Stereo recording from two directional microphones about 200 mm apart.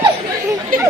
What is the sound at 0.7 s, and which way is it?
Chatter, 45° right (ahead or behind).